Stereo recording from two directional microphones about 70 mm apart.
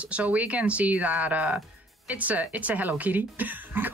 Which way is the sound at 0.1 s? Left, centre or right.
Right.